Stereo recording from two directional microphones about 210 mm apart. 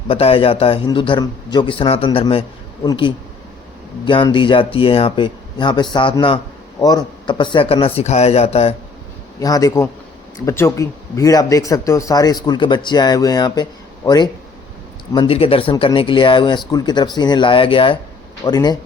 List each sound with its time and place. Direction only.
0.1 s speech: 25° left (ahead or behind)
9.4 s speech: 15° left (ahead or behind)